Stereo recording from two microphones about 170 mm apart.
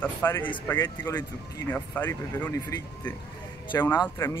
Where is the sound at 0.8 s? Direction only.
25° left (ahead or behind).